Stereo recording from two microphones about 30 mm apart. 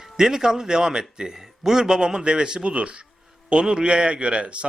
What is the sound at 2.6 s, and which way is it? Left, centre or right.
Speech, right.